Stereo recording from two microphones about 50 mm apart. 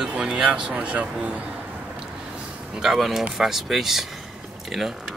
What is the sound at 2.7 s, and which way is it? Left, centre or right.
Speech, centre.